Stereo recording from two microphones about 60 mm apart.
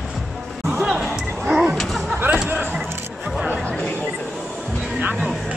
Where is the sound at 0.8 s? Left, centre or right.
Centre.